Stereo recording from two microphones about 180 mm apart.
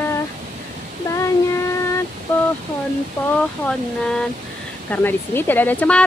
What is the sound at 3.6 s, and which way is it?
Speech, 5° left (ahead or behind).